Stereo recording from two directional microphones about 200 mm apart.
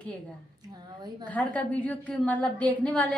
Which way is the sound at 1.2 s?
5° left (ahead or behind).